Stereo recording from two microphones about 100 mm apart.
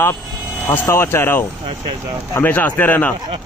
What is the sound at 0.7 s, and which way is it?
Speech, 25° left (ahead or behind).